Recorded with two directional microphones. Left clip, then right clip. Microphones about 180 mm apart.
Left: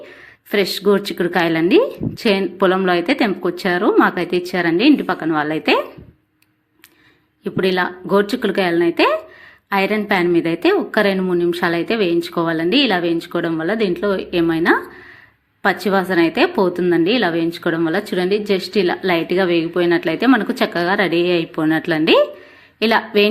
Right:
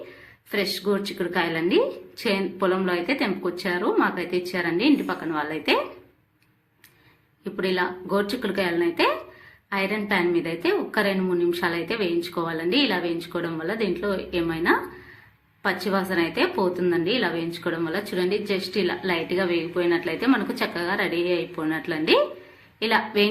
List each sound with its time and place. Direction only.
0.5 s a woman's voice: 40° left (ahead or behind)
7.4 s a woman's voice: 35° left (ahead or behind)